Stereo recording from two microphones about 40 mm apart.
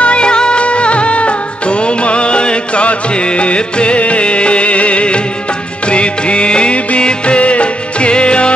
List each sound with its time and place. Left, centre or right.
0.0 s music of bollywood: left
5.9 s music: left